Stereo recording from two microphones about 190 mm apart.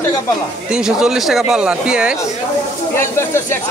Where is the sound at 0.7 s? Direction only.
5° right (ahead or behind).